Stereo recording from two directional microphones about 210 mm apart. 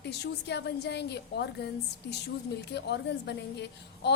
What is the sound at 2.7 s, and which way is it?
A woman's voice, 55° left (ahead or behind).